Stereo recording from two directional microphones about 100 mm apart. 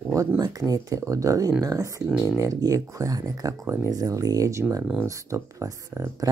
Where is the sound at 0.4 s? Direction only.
40° right (ahead or behind).